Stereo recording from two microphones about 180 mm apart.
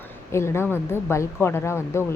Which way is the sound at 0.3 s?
15° left (ahead or behind).